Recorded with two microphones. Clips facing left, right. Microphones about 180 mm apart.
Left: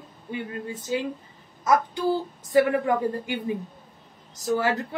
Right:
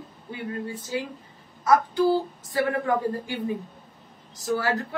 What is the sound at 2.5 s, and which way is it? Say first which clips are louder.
Speech: left 5 dB; 20° left (ahead or behind).